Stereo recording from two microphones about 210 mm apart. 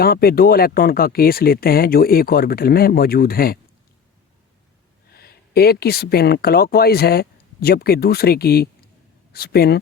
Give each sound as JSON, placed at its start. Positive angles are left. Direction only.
{"t": 0.0, "sound": "speech", "side_deg": 45}
{"t": 5.1, "sound": "speech", "side_deg": 50}